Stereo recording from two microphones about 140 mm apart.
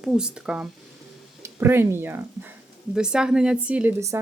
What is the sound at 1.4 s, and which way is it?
Speech, 15° right (ahead or behind).